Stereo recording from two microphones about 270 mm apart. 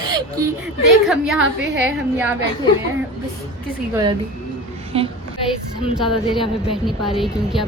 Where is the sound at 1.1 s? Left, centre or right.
Centre.